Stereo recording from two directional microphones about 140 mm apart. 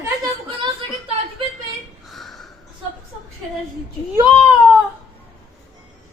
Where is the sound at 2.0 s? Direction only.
Centre (ahead or behind).